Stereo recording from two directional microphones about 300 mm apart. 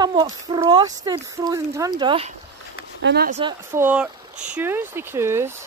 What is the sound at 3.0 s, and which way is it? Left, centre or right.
Speech, right.